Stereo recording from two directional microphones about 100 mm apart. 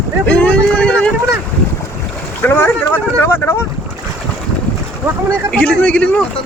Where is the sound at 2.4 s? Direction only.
20° left (ahead or behind).